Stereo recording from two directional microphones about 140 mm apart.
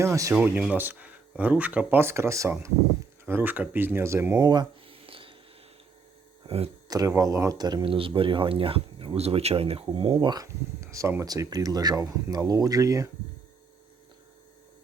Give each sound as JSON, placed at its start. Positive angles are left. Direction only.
{"t": 0.0, "sound": "speech", "side_deg": -20}
{"t": 0.3, "sound": "speech", "side_deg": -10}
{"t": 4.4, "sound": "a sound", "side_deg": -30}
{"t": 6.8, "sound": "speech", "side_deg": -25}